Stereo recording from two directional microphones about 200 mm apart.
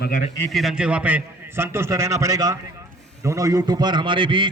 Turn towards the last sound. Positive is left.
turn(degrees=-25)  # may be behind; listen again after turning